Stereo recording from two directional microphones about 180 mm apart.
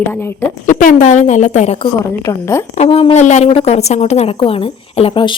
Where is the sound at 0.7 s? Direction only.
45° left (ahead or behind).